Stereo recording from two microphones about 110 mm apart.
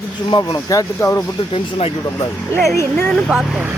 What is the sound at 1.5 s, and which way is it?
Speech, 60° left (ahead or behind).